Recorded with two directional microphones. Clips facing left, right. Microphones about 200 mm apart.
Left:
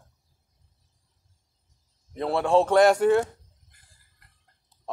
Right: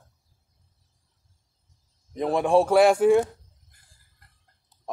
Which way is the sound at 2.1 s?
15° right (ahead or behind).